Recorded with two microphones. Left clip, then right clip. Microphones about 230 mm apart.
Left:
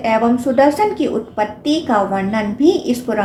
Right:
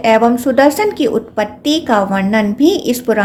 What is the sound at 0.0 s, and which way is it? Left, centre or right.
A woman's voice, right.